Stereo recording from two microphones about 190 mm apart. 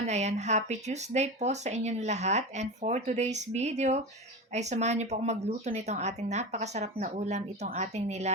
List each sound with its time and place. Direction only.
0.0 s speech: 35° right (ahead or behind)